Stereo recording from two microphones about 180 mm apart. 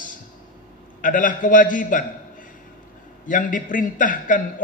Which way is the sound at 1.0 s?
45° left (ahead or behind).